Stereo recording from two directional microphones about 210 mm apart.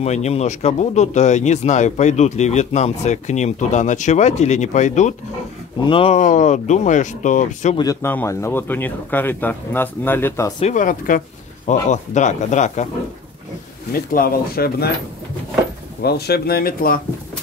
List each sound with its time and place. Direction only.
0.0 s speech: 30° left (ahead or behind)
5.8 s speech: 25° left (ahead or behind)
7.7 s speech: 15° left (ahead or behind)
10.6 s speech: 35° left (ahead or behind)
14.1 s speech: 45° left (ahead or behind)
16.0 s speech: 50° left (ahead or behind)